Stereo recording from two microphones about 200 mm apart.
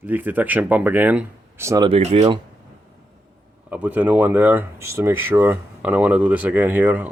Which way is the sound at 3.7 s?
10° right (ahead or behind).